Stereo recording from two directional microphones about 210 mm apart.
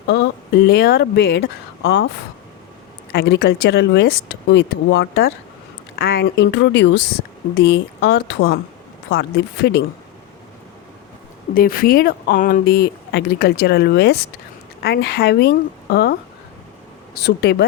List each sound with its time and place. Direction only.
0.7 s speech: 50° left (ahead or behind)
3.1 s speech: 50° left (ahead or behind)
11.5 s speech: 45° left (ahead or behind)
17.2 s speech: 50° left (ahead or behind)